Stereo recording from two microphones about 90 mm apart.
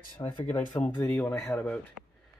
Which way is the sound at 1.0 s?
30° left (ahead or behind).